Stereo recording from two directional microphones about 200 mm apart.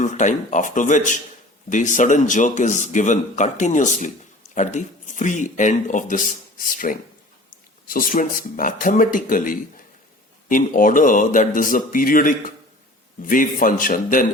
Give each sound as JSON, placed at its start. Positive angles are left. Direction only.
{"t": 0.0, "sound": "speech", "side_deg": 40}